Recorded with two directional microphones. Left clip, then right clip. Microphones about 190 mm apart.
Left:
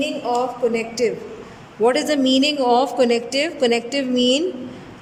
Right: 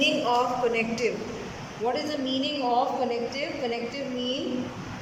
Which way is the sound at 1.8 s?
50° left (ahead or behind).